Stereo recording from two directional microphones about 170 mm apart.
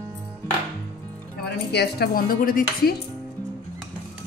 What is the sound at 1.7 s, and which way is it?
Speech, 70° left (ahead or behind).